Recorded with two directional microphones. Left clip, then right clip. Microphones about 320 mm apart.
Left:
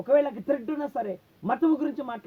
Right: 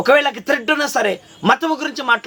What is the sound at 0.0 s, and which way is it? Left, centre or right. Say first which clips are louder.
Speech: right 9 dB; centre.